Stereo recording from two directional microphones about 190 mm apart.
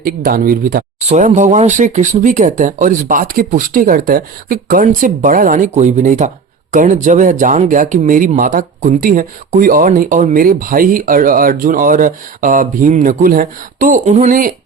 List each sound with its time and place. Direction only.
0.0 s speech: 50° right (ahead or behind)
0.9 s speech: 35° right (ahead or behind)